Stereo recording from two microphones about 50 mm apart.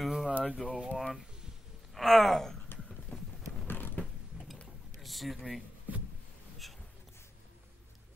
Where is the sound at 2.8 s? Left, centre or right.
Centre.